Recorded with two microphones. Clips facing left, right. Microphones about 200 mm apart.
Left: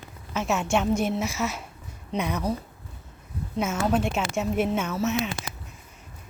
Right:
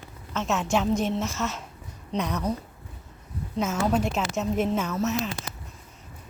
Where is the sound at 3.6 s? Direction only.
5° left (ahead or behind).